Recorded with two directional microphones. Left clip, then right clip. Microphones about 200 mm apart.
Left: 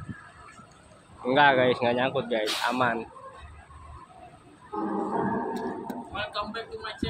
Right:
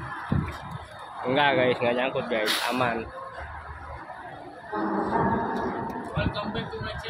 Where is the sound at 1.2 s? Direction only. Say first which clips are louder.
Left 2 dB; 25° left (ahead or behind).